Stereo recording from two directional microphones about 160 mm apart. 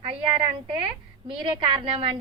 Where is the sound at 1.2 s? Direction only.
35° right (ahead or behind).